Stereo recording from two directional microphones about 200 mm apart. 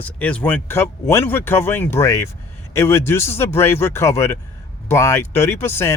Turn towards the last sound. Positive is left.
turn(degrees=10)  # may be behind; listen again after turning